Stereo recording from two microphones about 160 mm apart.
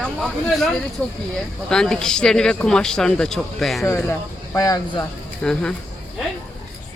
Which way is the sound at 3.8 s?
15° left (ahead or behind).